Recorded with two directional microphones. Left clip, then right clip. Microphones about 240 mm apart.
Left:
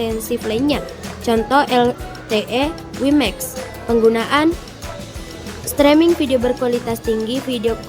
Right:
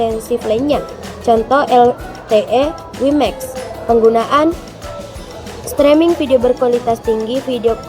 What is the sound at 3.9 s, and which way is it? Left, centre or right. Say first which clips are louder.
Speech: right 4 dB; left.